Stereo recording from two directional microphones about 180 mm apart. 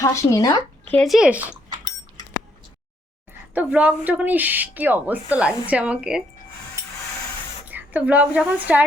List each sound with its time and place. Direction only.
0.0 s speech: 15° left (ahead or behind)
0.9 s speech: centre (ahead or behind)
3.5 s speech: 10° right (ahead or behind)
7.7 s a woman's voice: 10° right (ahead or behind)